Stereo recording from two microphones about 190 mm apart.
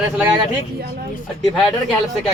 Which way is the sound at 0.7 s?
55° right (ahead or behind).